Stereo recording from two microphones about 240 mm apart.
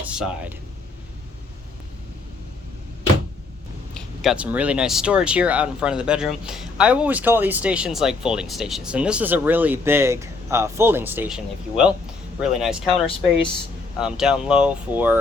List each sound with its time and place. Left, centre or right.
0.0 s speech: centre
3.9 s speech: centre
14.0 s speech: centre